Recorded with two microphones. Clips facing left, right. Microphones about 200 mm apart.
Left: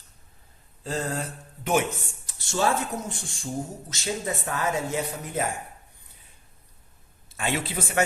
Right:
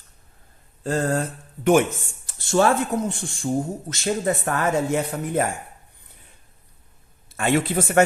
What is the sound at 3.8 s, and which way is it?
Speech, 55° right (ahead or behind).